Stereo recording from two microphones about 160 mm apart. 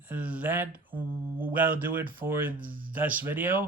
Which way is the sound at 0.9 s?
65° right (ahead or behind).